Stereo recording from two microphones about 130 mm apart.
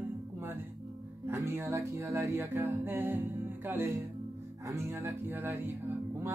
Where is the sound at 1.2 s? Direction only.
20° right (ahead or behind).